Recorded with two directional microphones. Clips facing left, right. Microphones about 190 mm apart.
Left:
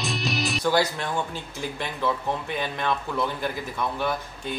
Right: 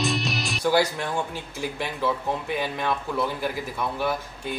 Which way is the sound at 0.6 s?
10° right (ahead or behind).